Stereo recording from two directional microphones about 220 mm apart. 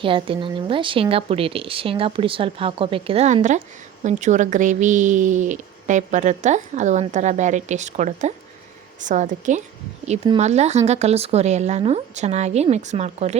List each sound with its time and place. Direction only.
0.0 s a woman's voice: 25° right (ahead or behind)